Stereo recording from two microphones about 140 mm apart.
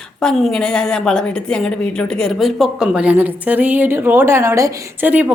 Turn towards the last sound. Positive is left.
turn(degrees=-15)  # may be behind; listen again after turning